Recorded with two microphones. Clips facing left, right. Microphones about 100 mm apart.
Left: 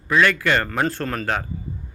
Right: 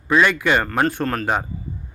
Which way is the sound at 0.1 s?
15° right (ahead or behind).